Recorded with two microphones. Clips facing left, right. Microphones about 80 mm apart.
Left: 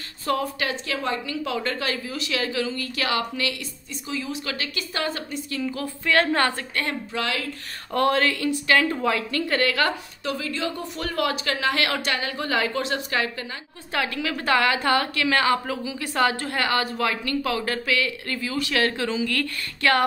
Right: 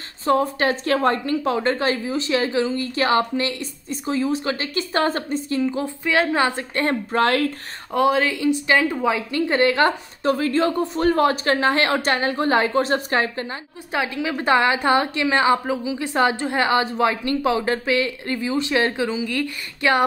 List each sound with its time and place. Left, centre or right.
0.4 s speech: right
6.0 s a woman's voice: centre
7.1 s speech: right
7.9 s a woman's voice: centre
10.2 s speech: right
13.9 s a woman's voice: centre